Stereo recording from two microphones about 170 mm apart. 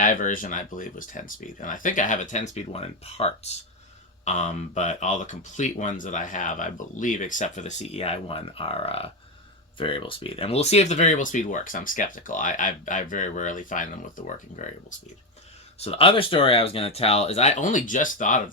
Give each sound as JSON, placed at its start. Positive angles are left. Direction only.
{"t": 0.0, "sound": "speech", "side_deg": 50}
{"t": 15.8, "sound": "speech", "side_deg": 35}